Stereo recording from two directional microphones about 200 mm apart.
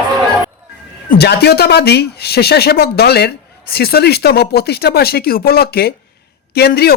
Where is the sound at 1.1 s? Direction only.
55° left (ahead or behind).